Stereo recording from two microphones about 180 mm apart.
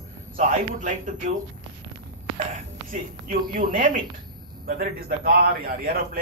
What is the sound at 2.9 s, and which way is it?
A man's voice, 50° right (ahead or behind).